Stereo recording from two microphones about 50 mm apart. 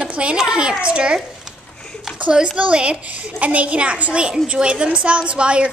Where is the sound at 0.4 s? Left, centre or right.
Centre.